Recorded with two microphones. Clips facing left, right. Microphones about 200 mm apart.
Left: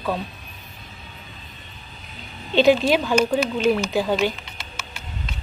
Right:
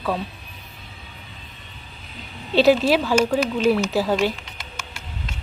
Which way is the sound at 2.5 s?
5° right (ahead or behind).